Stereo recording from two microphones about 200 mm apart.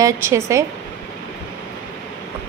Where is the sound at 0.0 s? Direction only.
15° right (ahead or behind).